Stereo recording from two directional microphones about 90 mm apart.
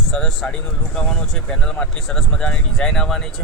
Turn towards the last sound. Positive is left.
turn(degrees=5)  # may be behind; listen again after turning